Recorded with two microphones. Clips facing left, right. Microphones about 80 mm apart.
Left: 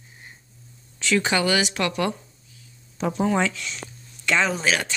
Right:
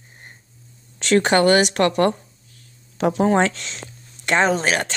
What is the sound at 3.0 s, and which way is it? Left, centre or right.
Speech, right.